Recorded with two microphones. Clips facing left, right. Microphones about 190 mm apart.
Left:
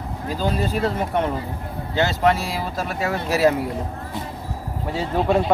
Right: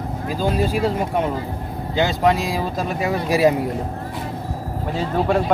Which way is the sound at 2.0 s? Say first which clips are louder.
Right 1 dB; 15° right (ahead or behind).